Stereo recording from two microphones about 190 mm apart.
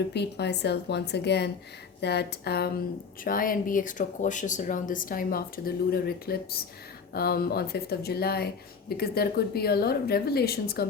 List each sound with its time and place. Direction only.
0.1 s speech: 60° left (ahead or behind)